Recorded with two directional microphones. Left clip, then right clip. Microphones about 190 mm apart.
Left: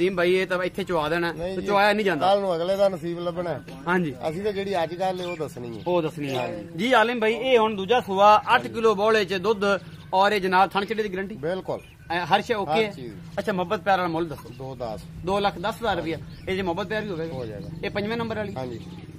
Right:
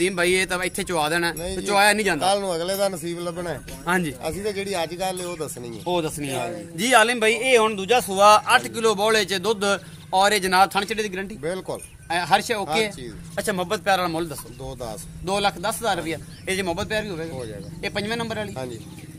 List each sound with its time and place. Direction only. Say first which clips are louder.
0.0 s speech: right 1 dB; 15° right (ahead or behind)
2.1 s speech: left 1 dB; 10° left (ahead or behind)
3.8 s speech: right 2 dB; 10° right (ahead or behind)
4.2 s speech: even; 10° left (ahead or behind)
5.9 s speech: even; 10° right (ahead or behind)
11.4 s speech: left 1 dB; 15° left (ahead or behind)
12.1 s speech: right 2 dB; 5° right (ahead or behind)